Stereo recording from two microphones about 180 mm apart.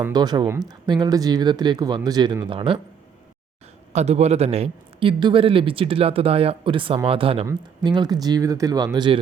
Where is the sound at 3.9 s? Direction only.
35° right (ahead or behind).